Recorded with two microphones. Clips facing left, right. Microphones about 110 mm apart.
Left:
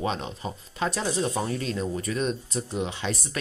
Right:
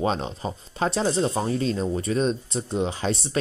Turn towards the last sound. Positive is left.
turn(degrees=-30)  # may be behind; listen again after turning